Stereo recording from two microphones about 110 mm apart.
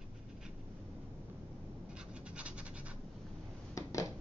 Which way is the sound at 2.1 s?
10° right (ahead or behind).